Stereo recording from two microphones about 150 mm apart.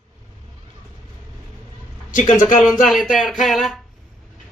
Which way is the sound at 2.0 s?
60° left (ahead or behind).